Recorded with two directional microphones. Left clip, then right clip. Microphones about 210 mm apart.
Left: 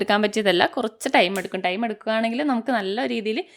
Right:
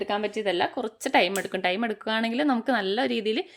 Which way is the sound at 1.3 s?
10° left (ahead or behind).